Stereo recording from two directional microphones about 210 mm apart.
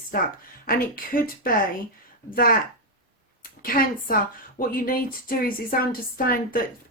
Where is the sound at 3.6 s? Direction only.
40° left (ahead or behind).